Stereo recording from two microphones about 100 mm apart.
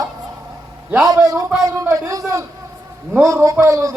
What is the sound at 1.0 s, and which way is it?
A man's voice, 40° right (ahead or behind).